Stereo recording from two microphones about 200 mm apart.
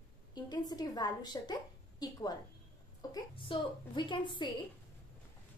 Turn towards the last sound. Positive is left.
turn(degrees=25)  # may be behind; listen again after turning